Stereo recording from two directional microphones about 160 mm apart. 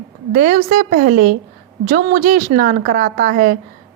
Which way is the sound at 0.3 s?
55° right (ahead or behind).